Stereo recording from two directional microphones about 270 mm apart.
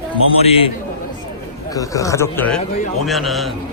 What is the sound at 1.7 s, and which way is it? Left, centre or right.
A man's voice, centre.